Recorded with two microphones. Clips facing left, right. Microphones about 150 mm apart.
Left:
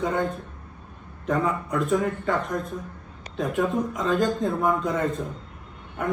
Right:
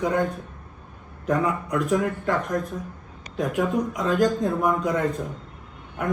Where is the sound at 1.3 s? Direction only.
Centre (ahead or behind).